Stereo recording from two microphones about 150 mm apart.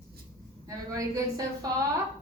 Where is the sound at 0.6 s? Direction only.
20° right (ahead or behind).